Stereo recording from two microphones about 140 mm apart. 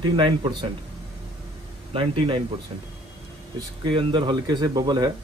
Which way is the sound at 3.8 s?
35° right (ahead or behind).